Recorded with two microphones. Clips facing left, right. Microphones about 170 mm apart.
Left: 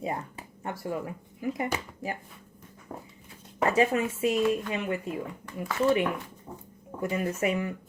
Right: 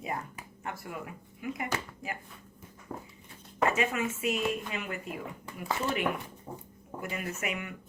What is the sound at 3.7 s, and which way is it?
Speech, 35° left (ahead or behind).